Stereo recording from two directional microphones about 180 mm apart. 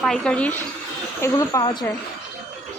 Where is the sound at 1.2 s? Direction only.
20° left (ahead or behind).